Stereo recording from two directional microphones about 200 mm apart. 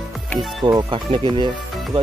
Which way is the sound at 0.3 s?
Centre (ahead or behind).